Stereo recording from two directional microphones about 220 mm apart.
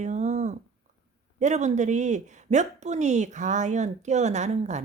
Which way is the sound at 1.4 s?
30° right (ahead or behind).